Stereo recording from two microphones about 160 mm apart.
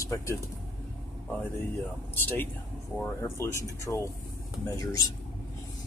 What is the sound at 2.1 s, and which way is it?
Speech, 15° left (ahead or behind).